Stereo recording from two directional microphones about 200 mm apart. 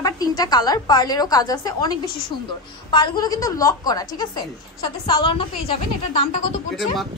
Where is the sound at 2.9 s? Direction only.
20° left (ahead or behind).